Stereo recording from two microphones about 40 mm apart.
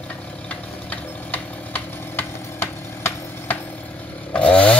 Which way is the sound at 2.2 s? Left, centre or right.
Left.